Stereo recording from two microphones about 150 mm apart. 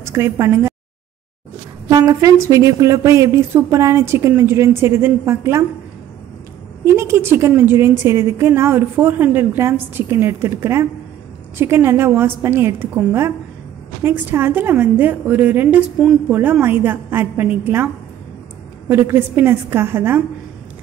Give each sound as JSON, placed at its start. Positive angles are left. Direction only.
{"t": 0.0, "sound": "a woman's voice", "side_deg": -20}
{"t": 1.9, "sound": "speech", "side_deg": -25}
{"t": 6.8, "sound": "a woman's voice", "side_deg": -20}
{"t": 18.9, "sound": "a woman's voice", "side_deg": -15}